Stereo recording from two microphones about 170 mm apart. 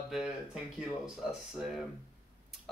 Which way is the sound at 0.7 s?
5° right (ahead or behind).